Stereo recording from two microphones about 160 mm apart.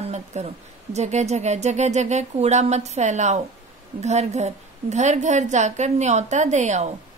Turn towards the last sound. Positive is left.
turn(degrees=-45)  # may be behind; listen again after turning